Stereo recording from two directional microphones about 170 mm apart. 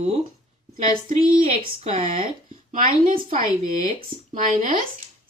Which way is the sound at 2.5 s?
50° right (ahead or behind).